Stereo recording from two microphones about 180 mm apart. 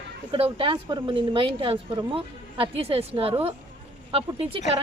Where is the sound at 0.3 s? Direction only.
30° right (ahead or behind).